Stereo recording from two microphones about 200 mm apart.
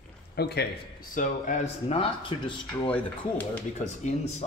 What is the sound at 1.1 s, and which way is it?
Speech, 40° left (ahead or behind).